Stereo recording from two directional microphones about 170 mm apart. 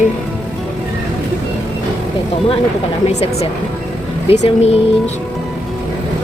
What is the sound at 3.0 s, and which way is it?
Speech, 40° left (ahead or behind).